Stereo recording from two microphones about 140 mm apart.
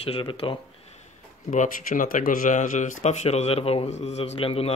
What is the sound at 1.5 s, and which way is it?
Speech, 70° left (ahead or behind).